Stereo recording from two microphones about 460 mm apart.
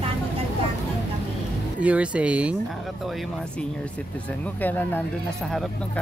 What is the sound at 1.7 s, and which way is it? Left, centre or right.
Speech, centre.